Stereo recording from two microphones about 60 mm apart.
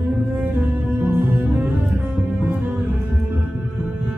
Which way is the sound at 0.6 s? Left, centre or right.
Right.